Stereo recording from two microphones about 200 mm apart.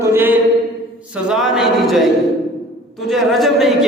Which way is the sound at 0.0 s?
10° right (ahead or behind).